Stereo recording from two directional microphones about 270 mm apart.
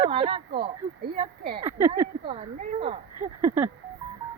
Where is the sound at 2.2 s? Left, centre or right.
Right.